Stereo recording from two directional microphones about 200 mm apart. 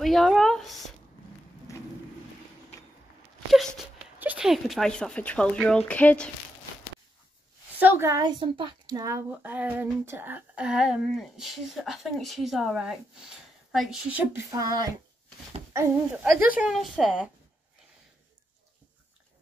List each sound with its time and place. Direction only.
0.0 s speech: centre (ahead or behind)
1.7 s thunder: 15° left (ahead or behind)
3.5 s speech: 5° right (ahead or behind)
7.8 s a child's voice: 10° right (ahead or behind)
16.3 s speech: 5° right (ahead or behind)